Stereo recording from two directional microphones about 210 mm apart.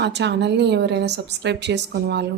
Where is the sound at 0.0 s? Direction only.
55° right (ahead or behind).